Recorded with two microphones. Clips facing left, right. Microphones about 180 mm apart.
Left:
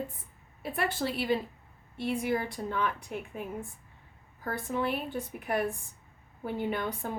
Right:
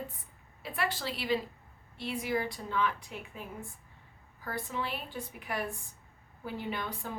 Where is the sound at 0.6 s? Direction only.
55° left (ahead or behind).